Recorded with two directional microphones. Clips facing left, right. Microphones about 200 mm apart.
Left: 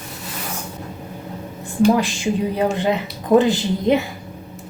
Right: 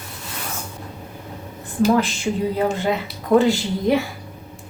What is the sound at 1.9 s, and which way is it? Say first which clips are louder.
Speech: left 1 dB; 15° left (ahead or behind).